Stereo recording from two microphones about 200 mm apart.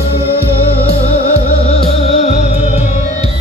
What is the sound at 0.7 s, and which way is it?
Music, 30° left (ahead or behind).